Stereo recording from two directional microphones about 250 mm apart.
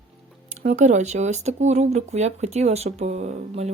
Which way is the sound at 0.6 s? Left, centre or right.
Right.